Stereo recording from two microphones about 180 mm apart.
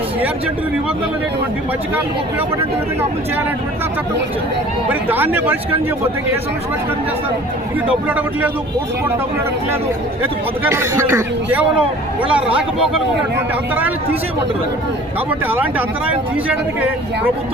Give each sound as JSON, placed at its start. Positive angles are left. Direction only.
{"t": 4.9, "sound": "a man's voice", "side_deg": -10}
{"t": 7.9, "sound": "a man's voice", "side_deg": -10}
{"t": 10.6, "sound": "a man's voice", "side_deg": -15}
{"t": 15.3, "sound": "a man's voice", "side_deg": -10}